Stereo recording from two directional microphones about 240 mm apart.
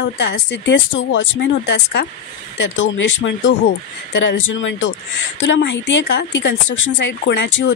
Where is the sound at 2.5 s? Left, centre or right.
Left.